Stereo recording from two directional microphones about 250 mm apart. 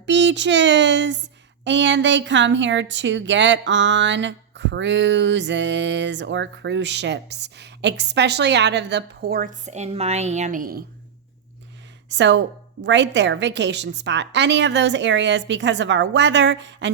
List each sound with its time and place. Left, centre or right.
0.0 s speech: right
12.0 s speech: right